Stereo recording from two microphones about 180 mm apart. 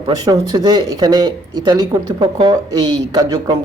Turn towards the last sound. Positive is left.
turn(degrees=-20)  # may be behind; listen again after turning